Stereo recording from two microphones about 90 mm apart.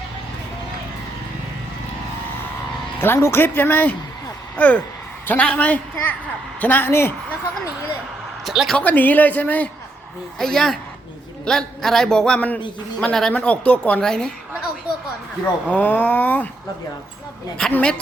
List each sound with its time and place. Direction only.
3.0 s a man's voice: 25° left (ahead or behind)
8.4 s speech: centre (ahead or behind)
8.8 s speech: 20° left (ahead or behind)
10.3 s a man's voice: 5° left (ahead or behind)
15.7 s a man's voice: 20° left (ahead or behind)
17.7 s a man's voice: 15° left (ahead or behind)